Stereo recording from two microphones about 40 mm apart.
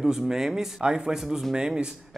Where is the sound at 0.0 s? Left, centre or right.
Centre.